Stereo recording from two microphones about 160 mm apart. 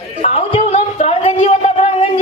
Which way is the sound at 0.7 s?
45° left (ahead or behind).